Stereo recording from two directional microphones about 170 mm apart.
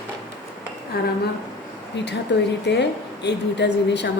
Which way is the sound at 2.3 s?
85° left.